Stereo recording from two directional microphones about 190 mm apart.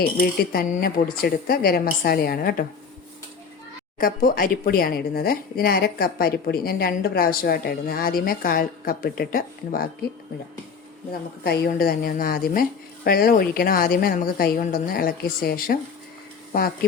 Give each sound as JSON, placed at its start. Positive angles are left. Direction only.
{"t": 0.0, "sound": "speech", "side_deg": 50}
{"t": 3.9, "sound": "speech", "side_deg": 50}
{"t": 11.4, "sound": "speech", "side_deg": 55}